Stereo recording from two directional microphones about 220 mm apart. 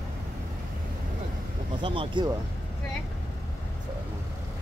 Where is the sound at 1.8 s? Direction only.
20° right (ahead or behind).